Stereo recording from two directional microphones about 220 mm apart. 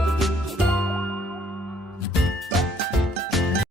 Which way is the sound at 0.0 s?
Centre (ahead or behind).